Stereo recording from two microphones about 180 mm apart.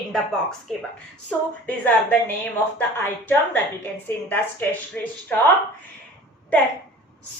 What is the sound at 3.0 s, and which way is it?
A woman's voice, 10° left (ahead or behind).